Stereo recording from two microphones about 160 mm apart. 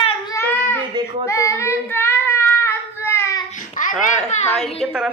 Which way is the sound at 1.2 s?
20° left (ahead or behind).